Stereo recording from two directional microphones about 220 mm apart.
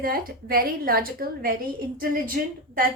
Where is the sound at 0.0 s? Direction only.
40° right (ahead or behind).